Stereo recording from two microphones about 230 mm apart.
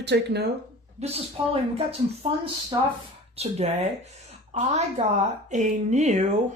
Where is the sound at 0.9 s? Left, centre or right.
Right.